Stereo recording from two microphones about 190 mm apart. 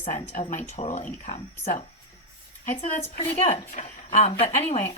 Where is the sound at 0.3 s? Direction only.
35° left (ahead or behind).